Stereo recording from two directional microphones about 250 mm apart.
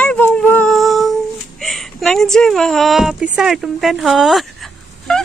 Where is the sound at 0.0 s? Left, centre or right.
Centre.